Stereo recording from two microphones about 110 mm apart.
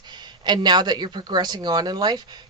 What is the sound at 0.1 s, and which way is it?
Speech, 40° right (ahead or behind).